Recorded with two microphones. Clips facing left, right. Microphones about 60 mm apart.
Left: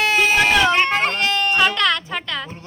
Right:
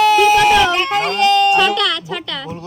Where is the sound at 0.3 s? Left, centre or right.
Centre.